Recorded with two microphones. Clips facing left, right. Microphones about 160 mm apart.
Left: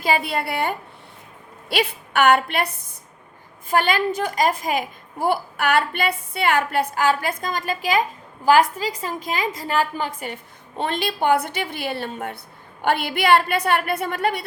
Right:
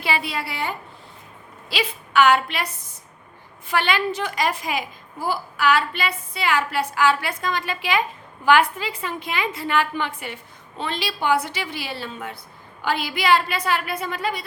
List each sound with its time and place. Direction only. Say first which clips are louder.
0.0 s a child's voice: left 4 dB; 50° left (ahead or behind)
1.8 s a child's voice: right 1 dB; 55° left (ahead or behind)
3.7 s a child's voice: left 2 dB; 45° left (ahead or behind)